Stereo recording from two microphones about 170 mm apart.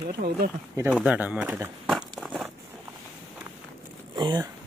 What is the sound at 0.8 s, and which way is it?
Speech, 5° right (ahead or behind).